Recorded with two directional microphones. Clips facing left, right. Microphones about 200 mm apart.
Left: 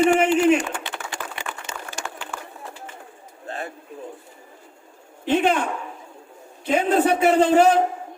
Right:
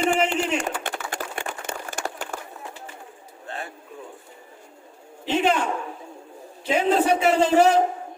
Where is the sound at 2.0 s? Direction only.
40° right (ahead or behind).